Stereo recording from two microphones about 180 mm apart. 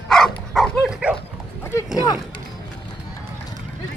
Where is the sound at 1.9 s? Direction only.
20° left (ahead or behind).